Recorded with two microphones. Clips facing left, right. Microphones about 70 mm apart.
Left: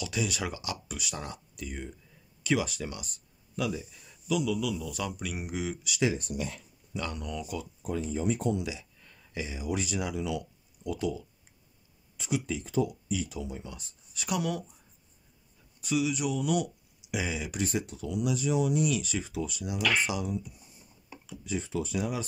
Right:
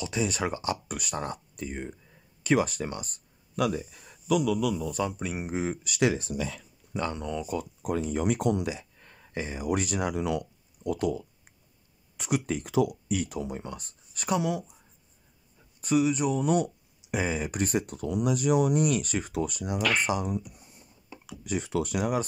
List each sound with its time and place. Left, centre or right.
0.0 s speech: right
7.0 s speech: right
7.8 s speech: right
8.6 s speech: right
15.8 s speech: right
21.3 s speech: right